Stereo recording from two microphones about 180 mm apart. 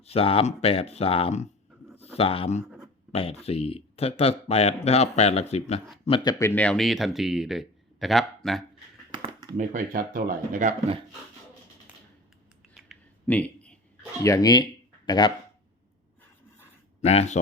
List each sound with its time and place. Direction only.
0.0 s speech: 35° left (ahead or behind)
2.6 s a sound: centre (ahead or behind)
3.1 s speech: 35° left (ahead or behind)
6.4 s speech: 10° left (ahead or behind)
9.1 s a sound: 25° right (ahead or behind)
9.6 s speech: 50° right (ahead or behind)
13.2 s a sound: 10° left (ahead or behind)
14.3 s speech: 20° left (ahead or behind)
17.0 s speech: 35° left (ahead or behind)